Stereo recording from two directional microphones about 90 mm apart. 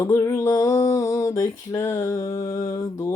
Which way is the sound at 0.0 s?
30° left (ahead or behind).